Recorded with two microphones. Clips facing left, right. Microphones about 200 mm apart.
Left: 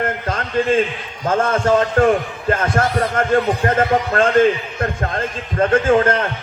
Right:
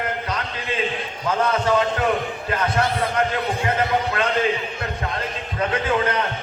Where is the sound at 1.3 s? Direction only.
45° left (ahead or behind).